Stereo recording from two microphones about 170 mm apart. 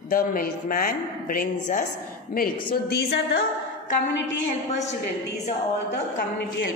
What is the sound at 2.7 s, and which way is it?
Speech, 70° left (ahead or behind).